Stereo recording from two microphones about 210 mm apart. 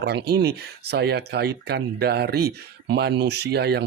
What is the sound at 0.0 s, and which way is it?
Speech, 50° right (ahead or behind).